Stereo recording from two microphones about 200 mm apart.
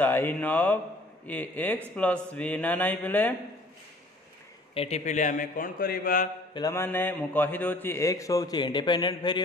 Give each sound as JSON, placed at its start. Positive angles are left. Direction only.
{"t": 0.0, "sound": "a man's voice", "side_deg": 10}
{"t": 4.7, "sound": "a man's voice", "side_deg": 35}
{"t": 6.5, "sound": "a man's voice", "side_deg": 15}